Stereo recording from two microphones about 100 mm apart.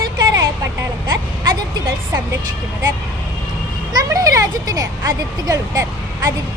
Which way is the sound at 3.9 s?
40° right (ahead or behind).